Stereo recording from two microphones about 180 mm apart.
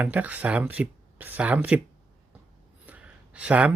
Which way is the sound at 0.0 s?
10° right (ahead or behind).